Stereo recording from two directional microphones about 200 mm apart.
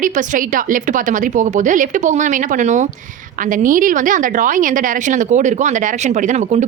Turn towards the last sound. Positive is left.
turn(degrees=-35)  # may be behind; listen again after turning